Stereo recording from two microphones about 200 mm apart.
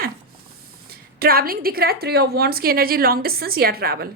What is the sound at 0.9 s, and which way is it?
A woman's voice, 50° right (ahead or behind).